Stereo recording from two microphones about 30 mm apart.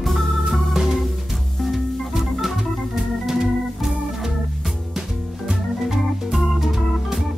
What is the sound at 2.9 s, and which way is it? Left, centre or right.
Organ, centre.